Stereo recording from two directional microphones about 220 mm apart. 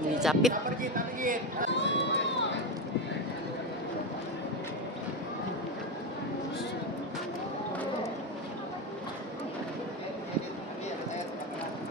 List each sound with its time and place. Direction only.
0.2 s speech: centre (ahead or behind)
0.5 s a man's voice: 40° right (ahead or behind)
1.7 s speech: 55° left (ahead or behind)